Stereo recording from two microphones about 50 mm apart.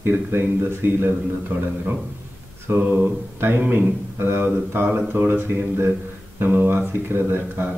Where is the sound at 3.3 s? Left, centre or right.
Right.